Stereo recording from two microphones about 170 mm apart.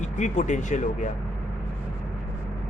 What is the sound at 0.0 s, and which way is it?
Speech, 45° left (ahead or behind).